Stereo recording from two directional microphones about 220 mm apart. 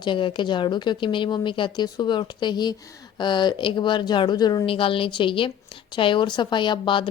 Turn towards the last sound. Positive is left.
turn(degrees=20)  # may be behind; listen again after turning